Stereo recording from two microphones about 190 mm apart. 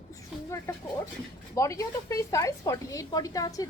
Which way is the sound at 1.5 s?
15° left (ahead or behind).